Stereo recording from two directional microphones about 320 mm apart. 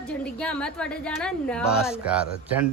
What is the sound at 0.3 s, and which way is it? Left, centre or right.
A woman's voice, centre.